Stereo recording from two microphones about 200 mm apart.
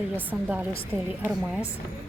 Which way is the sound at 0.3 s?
10° right (ahead or behind).